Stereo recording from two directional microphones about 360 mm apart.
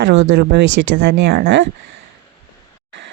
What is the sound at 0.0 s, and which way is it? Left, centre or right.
Speech, right.